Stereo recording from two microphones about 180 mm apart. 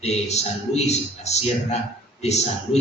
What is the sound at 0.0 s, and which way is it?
A man's voice, 35° left (ahead or behind).